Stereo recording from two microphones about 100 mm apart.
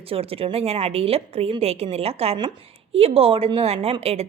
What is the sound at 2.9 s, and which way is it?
A woman's voice, 75° right (ahead or behind).